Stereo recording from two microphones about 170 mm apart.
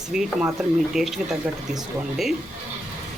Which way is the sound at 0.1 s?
Centre (ahead or behind).